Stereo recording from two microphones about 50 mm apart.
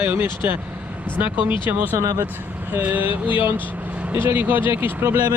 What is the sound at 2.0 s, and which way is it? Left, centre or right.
Speech, right.